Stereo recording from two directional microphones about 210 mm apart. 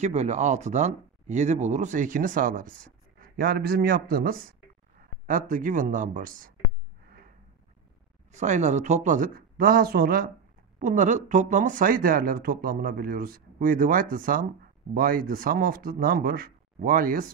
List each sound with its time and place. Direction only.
0.0 s speech: 30° right (ahead or behind)
8.3 s speech: 35° right (ahead or behind)